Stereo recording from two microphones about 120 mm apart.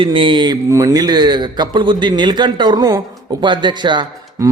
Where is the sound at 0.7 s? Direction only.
30° right (ahead or behind).